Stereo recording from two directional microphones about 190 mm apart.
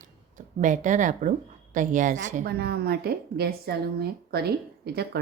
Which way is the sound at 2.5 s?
55° right (ahead or behind).